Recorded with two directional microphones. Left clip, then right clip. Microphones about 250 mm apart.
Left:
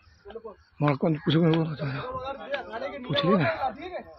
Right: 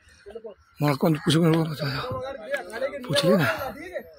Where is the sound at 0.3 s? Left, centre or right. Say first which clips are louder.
Right 1 dB; left.